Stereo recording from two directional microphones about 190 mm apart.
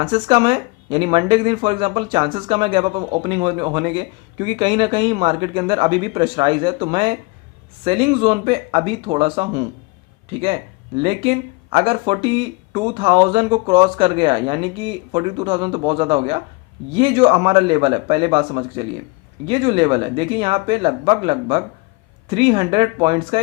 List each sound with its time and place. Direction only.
0.0 s speech: 25° right (ahead or behind)